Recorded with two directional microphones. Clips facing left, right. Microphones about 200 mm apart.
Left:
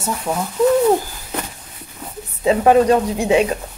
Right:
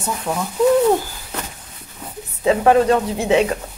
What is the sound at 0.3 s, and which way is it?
Speech, 10° left (ahead or behind).